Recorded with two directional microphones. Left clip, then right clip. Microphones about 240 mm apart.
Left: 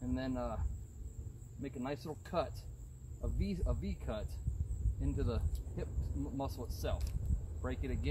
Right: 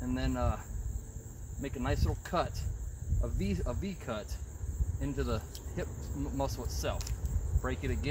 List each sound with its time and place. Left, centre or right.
0.1 s speech: centre
1.6 s speech: centre